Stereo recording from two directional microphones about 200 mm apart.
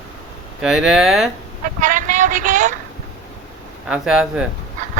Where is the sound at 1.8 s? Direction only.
40° right (ahead or behind).